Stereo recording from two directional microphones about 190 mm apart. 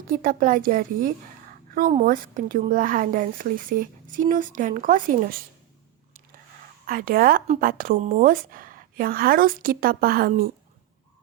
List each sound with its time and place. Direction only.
0.1 s speech: 45° right (ahead or behind)
6.8 s speech: 50° right (ahead or behind)